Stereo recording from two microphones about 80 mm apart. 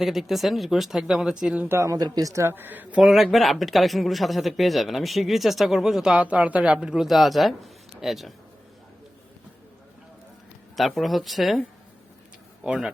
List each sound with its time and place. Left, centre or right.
0.0 s speech: centre
1.6 s speech: right
2.0 s speech: right
2.3 s speech: right
2.6 s speech: right
3.0 s speech: centre
10.8 s speech: centre
12.6 s speech: centre